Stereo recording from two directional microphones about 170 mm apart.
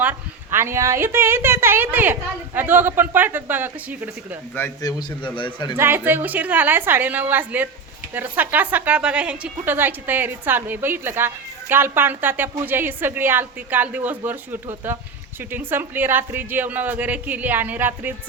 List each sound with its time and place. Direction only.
0.0 s a woman's voice: 10° right (ahead or behind)
4.5 s a man's voice: 15° left (ahead or behind)
5.7 s a woman's voice: 15° right (ahead or behind)